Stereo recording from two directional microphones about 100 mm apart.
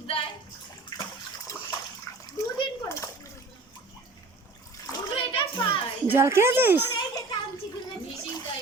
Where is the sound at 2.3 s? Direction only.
35° left (ahead or behind).